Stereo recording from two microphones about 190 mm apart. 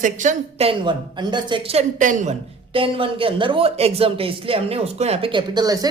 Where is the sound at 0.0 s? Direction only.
40° right (ahead or behind).